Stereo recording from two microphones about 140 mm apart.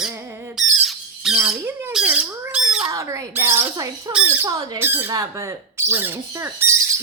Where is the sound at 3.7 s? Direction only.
25° right (ahead or behind).